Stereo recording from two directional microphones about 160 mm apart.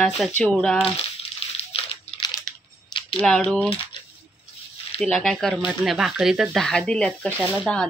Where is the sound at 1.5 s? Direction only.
40° left (ahead or behind).